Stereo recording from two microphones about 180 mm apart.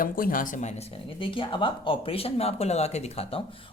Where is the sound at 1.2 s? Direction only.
30° left (ahead or behind).